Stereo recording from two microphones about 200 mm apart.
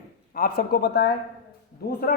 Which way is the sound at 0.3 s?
50° left (ahead or behind).